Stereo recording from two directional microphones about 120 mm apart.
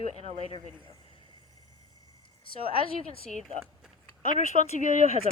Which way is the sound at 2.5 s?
50° left (ahead or behind).